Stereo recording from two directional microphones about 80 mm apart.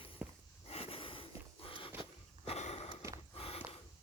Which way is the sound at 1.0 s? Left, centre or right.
Left.